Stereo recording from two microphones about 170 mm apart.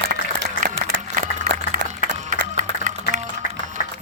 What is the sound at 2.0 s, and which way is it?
Run, 50° right (ahead or behind).